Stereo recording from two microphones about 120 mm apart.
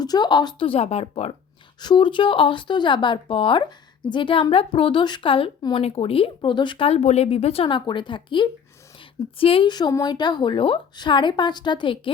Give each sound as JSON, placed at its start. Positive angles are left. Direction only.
{"t": 0.0, "sound": "a woman's voice", "side_deg": 35}
{"t": 0.7, "sound": "speech", "side_deg": 60}
{"t": 1.8, "sound": "a woman's voice", "side_deg": 40}